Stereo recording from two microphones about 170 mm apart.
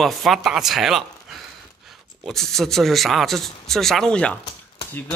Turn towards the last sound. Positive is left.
turn(degrees=10)  # may be behind; listen again after turning